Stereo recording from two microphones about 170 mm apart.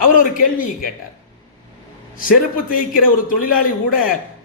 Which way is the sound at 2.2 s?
55° left (ahead or behind).